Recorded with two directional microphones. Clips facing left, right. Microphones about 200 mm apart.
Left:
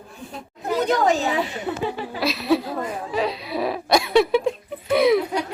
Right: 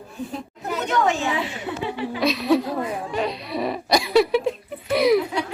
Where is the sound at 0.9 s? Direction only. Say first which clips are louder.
Even; 35° left (ahead or behind).